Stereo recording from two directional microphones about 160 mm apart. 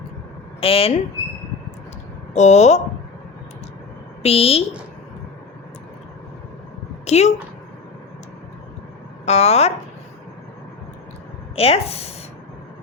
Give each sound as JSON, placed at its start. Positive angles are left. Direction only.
{"t": 0.6, "sound": "speech", "side_deg": 35}
{"t": 2.3, "sound": "speech", "side_deg": 45}
{"t": 4.2, "sound": "speech", "side_deg": 40}
{"t": 7.0, "sound": "speech", "side_deg": 45}
{"t": 9.2, "sound": "speech", "side_deg": 40}
{"t": 11.5, "sound": "speech", "side_deg": 40}